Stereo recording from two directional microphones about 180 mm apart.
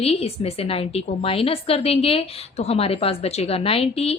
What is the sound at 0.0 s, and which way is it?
A woman's voice, 35° left (ahead or behind).